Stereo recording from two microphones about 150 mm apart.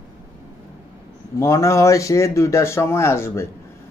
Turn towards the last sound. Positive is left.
turn(degrees=15)  # may be behind; listen again after turning